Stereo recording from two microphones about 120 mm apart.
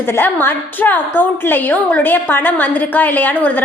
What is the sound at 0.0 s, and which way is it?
A woman's voice, 20° left (ahead or behind).